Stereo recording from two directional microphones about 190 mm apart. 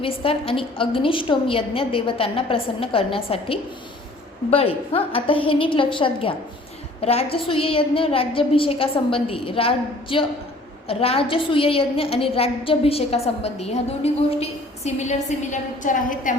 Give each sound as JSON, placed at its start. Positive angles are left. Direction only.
{"t": 0.0, "sound": "a woman's voice", "side_deg": 30}